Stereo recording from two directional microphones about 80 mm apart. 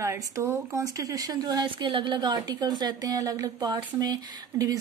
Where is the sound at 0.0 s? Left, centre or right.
Right.